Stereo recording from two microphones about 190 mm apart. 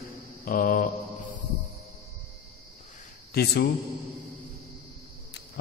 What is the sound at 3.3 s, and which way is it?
Speech, 55° left (ahead or behind).